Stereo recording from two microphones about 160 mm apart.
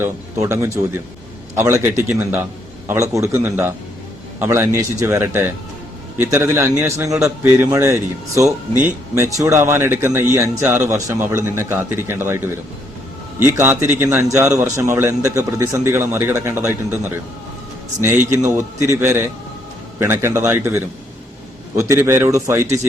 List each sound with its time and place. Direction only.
0.0 s a man's voice: 15° right (ahead or behind)
18.0 s a man's voice: 15° right (ahead or behind)